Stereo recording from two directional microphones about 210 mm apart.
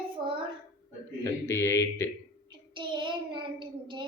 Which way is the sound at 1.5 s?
10° left (ahead or behind).